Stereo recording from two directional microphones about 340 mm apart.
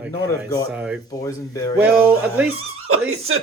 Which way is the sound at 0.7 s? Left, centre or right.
Centre.